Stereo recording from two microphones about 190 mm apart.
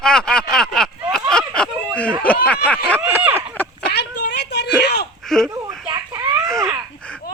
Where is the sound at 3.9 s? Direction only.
60° left (ahead or behind).